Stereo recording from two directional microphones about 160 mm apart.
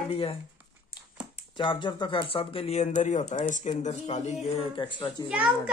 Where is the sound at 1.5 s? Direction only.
30° left (ahead or behind).